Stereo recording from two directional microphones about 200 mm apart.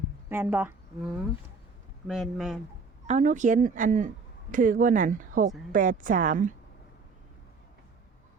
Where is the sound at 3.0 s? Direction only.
35° right (ahead or behind).